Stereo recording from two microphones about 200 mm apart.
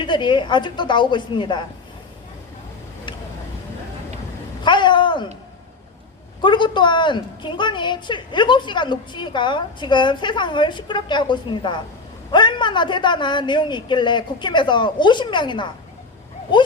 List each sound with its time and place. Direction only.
0.0 s a woman's voice: 25° left (ahead or behind)
4.6 s a sound: 25° left (ahead or behind)
6.4 s a woman's voice: 25° left (ahead or behind)